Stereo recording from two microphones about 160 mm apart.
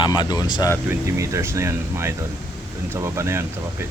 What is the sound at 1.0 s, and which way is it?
Speech, 20° right (ahead or behind).